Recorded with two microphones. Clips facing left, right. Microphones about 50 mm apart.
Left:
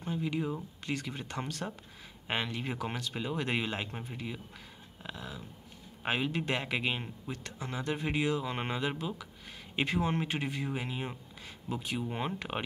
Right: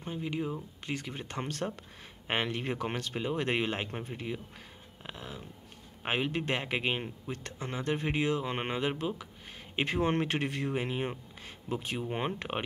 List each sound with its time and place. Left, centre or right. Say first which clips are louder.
0.0 s a man's voice: left 1 dB; right
5.0 s a sound: left 1 dB; right
6.0 s a man's voice: right 1 dB; right